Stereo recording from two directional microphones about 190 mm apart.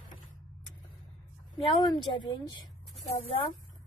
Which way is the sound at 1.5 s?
25° left (ahead or behind).